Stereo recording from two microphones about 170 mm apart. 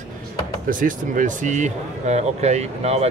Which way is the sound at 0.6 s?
50° right (ahead or behind).